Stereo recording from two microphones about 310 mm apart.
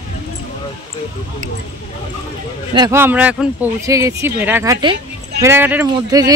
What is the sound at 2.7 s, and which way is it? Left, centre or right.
Speech, centre.